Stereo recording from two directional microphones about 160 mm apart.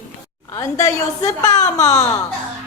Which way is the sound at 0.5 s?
20° left (ahead or behind).